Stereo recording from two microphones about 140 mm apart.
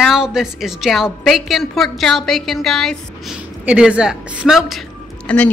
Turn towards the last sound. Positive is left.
turn(degrees=10)  # may be behind; listen again after turning